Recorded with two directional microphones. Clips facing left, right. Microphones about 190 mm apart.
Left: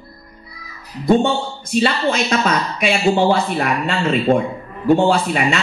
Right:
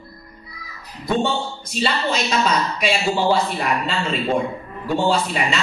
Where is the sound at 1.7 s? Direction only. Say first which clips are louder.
Left 5 dB; 55° left (ahead or behind).